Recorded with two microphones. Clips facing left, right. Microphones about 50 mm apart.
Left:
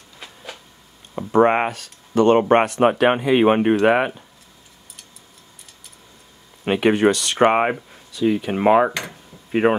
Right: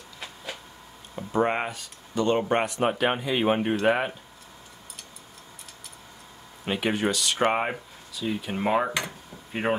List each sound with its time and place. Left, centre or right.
1.3 s speech: left
6.6 s speech: left
9.6 s speech: left